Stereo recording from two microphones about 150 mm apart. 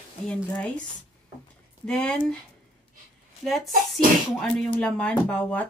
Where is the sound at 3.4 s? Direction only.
Centre (ahead or behind).